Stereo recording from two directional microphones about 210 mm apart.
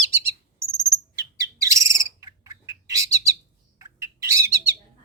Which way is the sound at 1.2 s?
15° right (ahead or behind).